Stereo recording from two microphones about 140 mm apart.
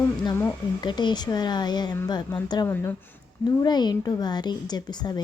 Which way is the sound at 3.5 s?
30° left (ahead or behind).